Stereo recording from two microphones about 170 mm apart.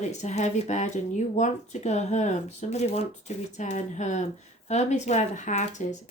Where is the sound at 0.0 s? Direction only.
40° left (ahead or behind).